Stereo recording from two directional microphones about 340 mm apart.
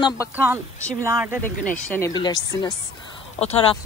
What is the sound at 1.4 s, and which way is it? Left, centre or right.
Speech, centre.